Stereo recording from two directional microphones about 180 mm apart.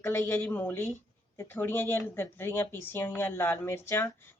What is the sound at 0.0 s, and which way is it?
Speech, 15° left (ahead or behind).